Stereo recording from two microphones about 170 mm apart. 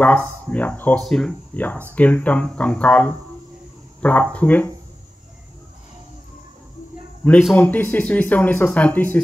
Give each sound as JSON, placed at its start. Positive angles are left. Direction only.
{"t": 0.0, "sound": "speech", "side_deg": 10}
{"t": 7.5, "sound": "speech", "side_deg": 10}